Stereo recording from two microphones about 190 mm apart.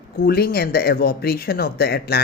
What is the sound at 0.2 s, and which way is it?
Speech, 55° left (ahead or behind).